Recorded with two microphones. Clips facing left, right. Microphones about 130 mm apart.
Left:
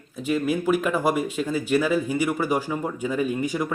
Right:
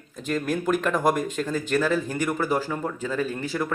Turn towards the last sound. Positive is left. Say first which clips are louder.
# left 3 dB
turn(degrees=15)  # may be behind; listen again after turning